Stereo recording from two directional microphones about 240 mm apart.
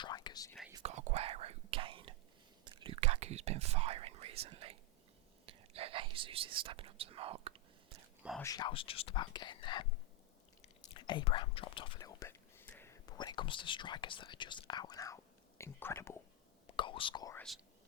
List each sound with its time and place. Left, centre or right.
0.0 s whispering: centre
0.7 s whispering: right
8.4 s speech: centre
10.9 s speech: centre
16.6 s whispering: left